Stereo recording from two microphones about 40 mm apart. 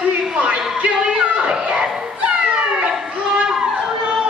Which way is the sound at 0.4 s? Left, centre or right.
Right.